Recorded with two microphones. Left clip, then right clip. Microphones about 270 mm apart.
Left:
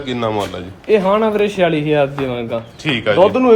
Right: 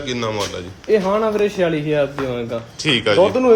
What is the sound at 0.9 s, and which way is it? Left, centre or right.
A man's voice, left.